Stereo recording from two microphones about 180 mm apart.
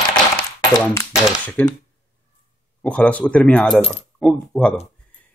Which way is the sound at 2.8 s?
5° left (ahead or behind).